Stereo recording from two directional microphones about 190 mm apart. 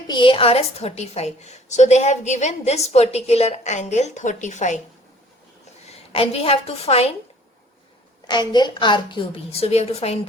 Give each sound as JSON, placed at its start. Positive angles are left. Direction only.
{"t": 0.1, "sound": "a woman's voice", "side_deg": 25}
{"t": 5.8, "sound": "a woman's voice", "side_deg": 30}
{"t": 8.3, "sound": "a woman's voice", "side_deg": 25}